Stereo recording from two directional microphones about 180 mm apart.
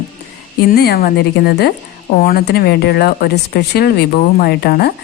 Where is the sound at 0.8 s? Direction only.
60° left (ahead or behind).